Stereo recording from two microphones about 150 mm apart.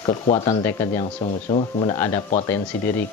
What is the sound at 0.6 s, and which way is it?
Speech, 15° left (ahead or behind).